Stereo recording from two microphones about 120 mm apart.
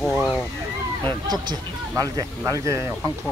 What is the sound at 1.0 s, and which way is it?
Speech, 35° right (ahead or behind).